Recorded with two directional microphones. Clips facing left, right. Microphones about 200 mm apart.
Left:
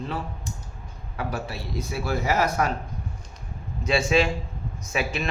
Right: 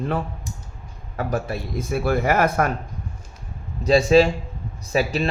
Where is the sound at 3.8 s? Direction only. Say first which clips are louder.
Right 7 dB; 40° right (ahead or behind).